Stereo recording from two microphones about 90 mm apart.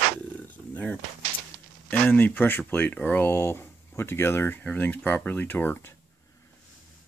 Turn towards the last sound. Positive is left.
turn(degrees=25)  # may be behind; listen again after turning